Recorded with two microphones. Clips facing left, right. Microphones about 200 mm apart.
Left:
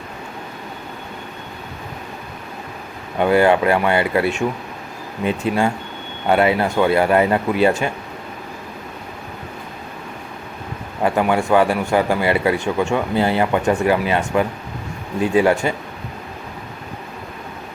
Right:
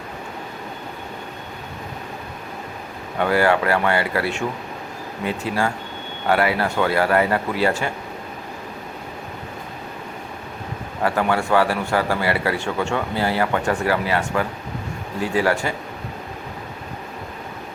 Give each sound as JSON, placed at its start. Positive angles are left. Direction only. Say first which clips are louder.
{"t": 3.2, "sound": "a man's voice", "louder": "left 4 dB", "side_deg": 20}
{"t": 11.0, "sound": "a man's voice", "louder": "left 3 dB", "side_deg": 20}